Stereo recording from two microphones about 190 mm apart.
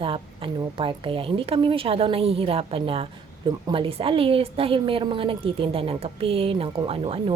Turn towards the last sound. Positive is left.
turn(degrees=-30)  # may be behind; listen again after turning